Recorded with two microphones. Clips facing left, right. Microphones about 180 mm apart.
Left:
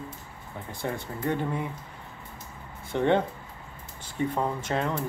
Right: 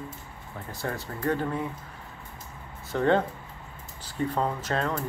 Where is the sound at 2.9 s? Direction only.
25° left (ahead or behind).